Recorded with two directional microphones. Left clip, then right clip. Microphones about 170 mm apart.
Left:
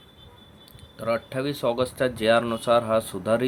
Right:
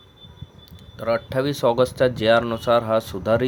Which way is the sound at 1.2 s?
30° right (ahead or behind).